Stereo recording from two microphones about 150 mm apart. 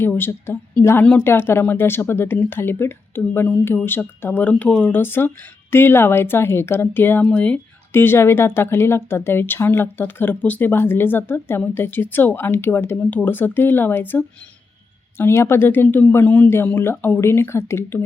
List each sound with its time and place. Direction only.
0.0 s speech: 15° left (ahead or behind)